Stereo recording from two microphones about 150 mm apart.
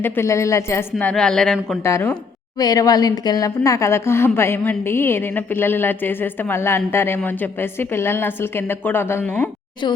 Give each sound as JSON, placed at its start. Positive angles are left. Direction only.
{"t": 0.0, "sound": "a woman's voice", "side_deg": 20}
{"t": 1.8, "sound": "a woman's voice", "side_deg": 15}